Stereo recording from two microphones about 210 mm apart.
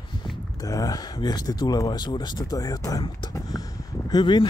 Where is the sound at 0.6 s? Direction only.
15° left (ahead or behind).